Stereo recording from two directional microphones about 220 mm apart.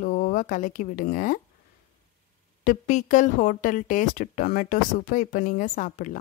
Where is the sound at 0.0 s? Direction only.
40° left (ahead or behind).